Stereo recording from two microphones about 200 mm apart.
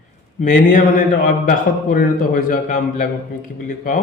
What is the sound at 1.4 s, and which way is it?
A man's voice, 45° left (ahead or behind).